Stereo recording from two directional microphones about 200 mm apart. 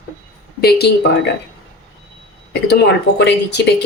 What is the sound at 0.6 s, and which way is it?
Speech, 50° left (ahead or behind).